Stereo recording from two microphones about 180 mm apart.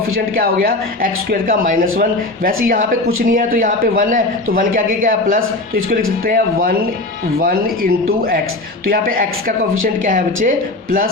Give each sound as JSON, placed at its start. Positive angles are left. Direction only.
{"t": 0.3, "sound": "speech", "side_deg": -55}